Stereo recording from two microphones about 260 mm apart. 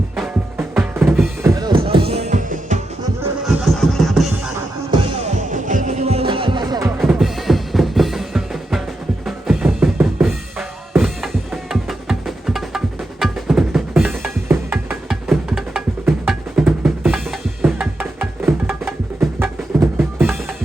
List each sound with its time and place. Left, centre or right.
0.2 s music: centre; by 2.8 s right
3.4 s music: centre
5.5 s music: right; by 6.9 s centre
7.0 s drum: centre
9.2 s music: centre